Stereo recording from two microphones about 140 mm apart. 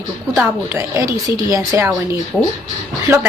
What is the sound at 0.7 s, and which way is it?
A woman's voice, 20° right (ahead or behind).